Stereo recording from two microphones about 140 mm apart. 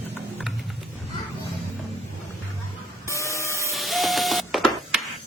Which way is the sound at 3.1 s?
20° left (ahead or behind).